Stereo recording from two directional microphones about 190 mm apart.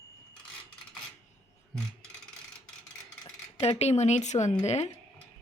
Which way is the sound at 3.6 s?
35° left (ahead or behind).